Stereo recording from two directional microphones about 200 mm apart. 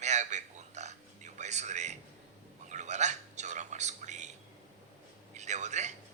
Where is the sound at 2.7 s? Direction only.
35° right (ahead or behind).